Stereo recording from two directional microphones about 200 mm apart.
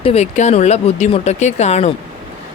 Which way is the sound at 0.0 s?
30° left (ahead or behind).